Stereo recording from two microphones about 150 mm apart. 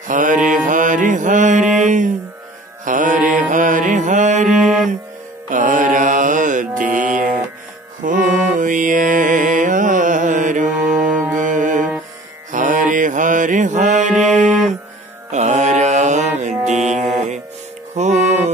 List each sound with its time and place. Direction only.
0.1 s mantra: 60° right (ahead or behind)
2.8 s music: 60° right (ahead or behind)
4.6 s music: 5° right (ahead or behind)
5.5 s mantra: 60° right (ahead or behind)
8.0 s music: 60° right (ahead or behind)
11.1 s music: 10° right (ahead or behind)
11.3 s music: 60° right (ahead or behind)
12.4 s mantra: 60° right (ahead or behind)
17.9 s music: 50° right (ahead or behind)